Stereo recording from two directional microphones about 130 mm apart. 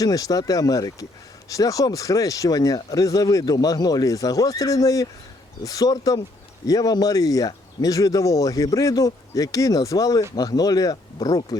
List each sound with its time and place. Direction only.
0.0 s speech: 30° left (ahead or behind)